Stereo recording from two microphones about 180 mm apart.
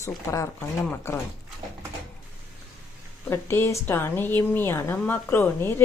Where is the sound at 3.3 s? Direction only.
15° left (ahead or behind).